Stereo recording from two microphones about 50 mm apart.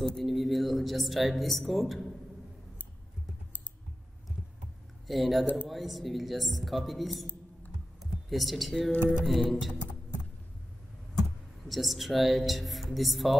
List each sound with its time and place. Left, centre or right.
0.2 s a woman's voice: centre
5.0 s a woman's voice: centre
11.6 s a woman's voice: centre